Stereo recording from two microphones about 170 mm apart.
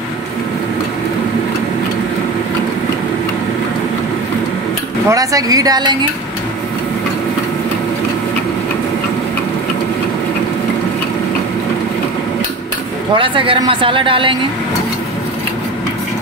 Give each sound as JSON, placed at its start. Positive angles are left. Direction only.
{"t": 5.1, "sound": "speech", "side_deg": -20}
{"t": 13.1, "sound": "speech", "side_deg": -30}